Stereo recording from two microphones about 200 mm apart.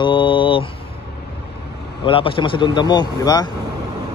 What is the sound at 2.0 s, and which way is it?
Speech, 25° left (ahead or behind).